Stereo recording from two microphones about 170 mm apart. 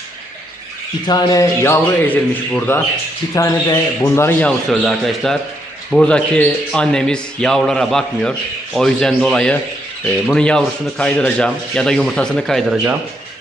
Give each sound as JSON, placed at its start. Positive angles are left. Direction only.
{"t": 1.0, "sound": "a man's voice", "side_deg": 25}